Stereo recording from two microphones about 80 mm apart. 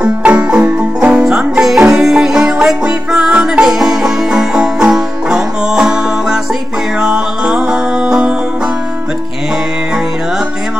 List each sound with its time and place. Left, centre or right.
0.0 s music: centre
7.0 s music: centre